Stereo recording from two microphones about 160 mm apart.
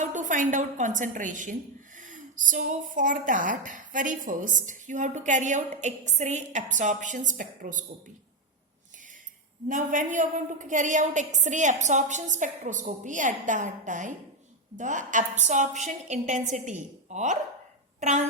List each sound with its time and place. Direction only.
0.0 s a woman's voice: 50° right (ahead or behind)
9.6 s speech: 55° right (ahead or behind)